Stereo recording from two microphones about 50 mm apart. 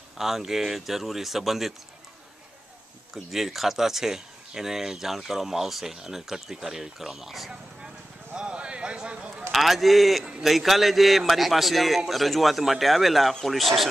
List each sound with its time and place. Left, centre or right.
0.2 s speech: centre
3.3 s speech: centre
8.4 s a sound: centre
9.5 s speech: centre